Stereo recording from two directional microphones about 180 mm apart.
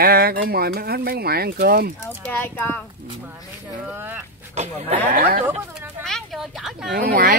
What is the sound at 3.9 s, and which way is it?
Speech, 10° right (ahead or behind).